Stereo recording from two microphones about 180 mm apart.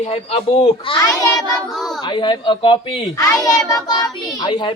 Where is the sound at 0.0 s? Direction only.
35° left (ahead or behind).